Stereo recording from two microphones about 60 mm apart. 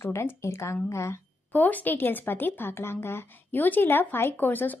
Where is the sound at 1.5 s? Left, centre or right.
Left.